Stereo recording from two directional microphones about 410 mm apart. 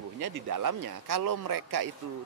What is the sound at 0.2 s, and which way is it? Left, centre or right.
A man's voice, right.